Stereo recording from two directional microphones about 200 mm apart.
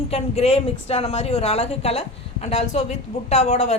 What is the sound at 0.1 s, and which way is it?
A woman's voice, 30° left (ahead or behind).